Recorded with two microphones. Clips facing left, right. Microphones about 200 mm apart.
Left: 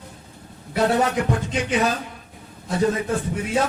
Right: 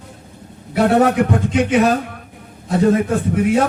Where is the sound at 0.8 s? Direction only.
60° right (ahead or behind).